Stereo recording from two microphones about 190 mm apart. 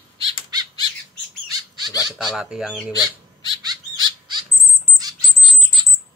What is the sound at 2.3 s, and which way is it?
Speech, 5° right (ahead or behind).